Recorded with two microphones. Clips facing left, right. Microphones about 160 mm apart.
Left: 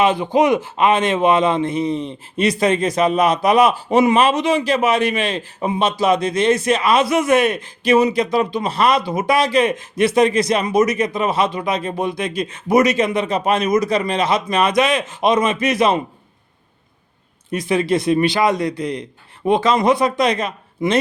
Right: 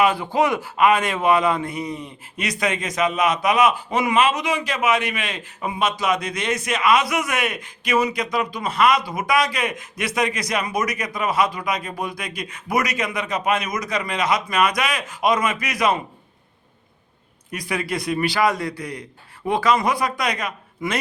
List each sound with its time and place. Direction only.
0.0 s a man's voice: 20° left (ahead or behind)
17.5 s a man's voice: 25° left (ahead or behind)